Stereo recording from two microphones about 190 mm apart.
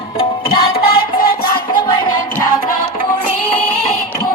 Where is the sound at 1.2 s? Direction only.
50° left (ahead or behind).